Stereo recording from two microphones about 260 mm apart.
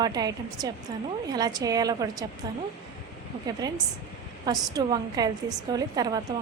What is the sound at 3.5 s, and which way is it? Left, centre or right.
A woman's voice, centre.